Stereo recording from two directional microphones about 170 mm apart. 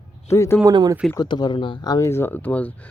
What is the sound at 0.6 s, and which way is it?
Speech, 20° right (ahead or behind).